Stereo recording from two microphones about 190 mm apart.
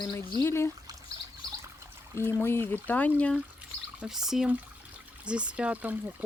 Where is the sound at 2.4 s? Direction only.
10° left (ahead or behind).